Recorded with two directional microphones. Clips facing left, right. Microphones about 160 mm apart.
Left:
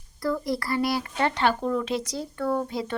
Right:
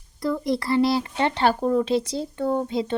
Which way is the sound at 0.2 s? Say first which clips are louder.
Right 3 dB; 20° right (ahead or behind).